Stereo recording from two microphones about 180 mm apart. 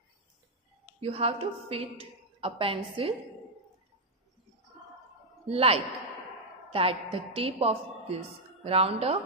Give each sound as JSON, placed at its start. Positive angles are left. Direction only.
{"t": 1.0, "sound": "a woman's voice", "side_deg": -30}
{"t": 5.5, "sound": "a woman's voice", "side_deg": -35}